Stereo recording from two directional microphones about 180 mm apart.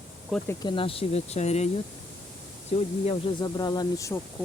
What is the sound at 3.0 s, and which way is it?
Speech, 30° left (ahead or behind).